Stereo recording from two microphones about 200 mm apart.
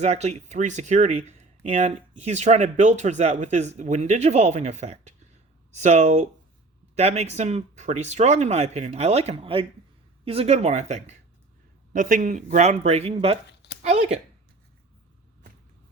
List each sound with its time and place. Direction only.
0.0 s speech: 35° right (ahead or behind)
13.5 s a sound: 60° left (ahead or behind)
13.8 s speech: 35° right (ahead or behind)